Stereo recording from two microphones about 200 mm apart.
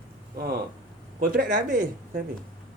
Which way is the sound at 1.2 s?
45° right (ahead or behind).